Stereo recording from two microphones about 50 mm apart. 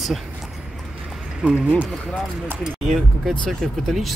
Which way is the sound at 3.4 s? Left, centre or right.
Centre.